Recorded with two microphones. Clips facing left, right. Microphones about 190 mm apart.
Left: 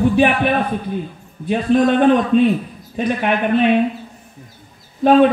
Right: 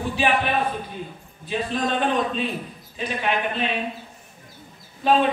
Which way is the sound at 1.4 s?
55° left (ahead or behind).